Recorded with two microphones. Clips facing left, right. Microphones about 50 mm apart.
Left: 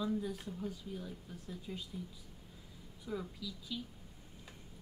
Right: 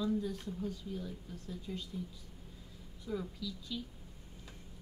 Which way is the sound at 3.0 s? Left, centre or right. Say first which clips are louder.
Right 2 dB; centre.